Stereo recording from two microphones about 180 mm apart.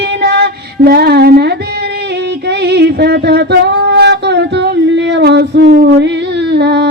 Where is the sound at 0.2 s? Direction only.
65° right (ahead or behind).